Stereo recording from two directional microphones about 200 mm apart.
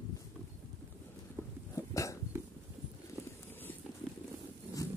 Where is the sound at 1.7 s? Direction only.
15° left (ahead or behind).